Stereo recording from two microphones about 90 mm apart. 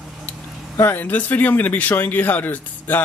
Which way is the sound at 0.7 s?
20° left (ahead or behind).